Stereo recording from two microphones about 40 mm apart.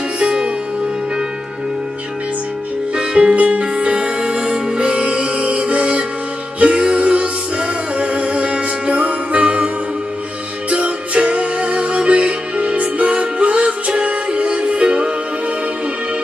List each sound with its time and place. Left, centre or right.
0.2 s music: right
3.0 s music: centre
10.7 s music: right